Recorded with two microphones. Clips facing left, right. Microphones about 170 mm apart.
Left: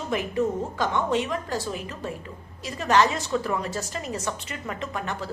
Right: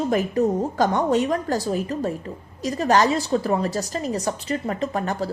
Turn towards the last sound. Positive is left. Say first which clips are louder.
# right 7 dB
turn(degrees=-35)  # may be behind; listen again after turning